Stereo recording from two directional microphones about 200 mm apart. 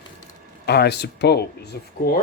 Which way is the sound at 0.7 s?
55° left (ahead or behind).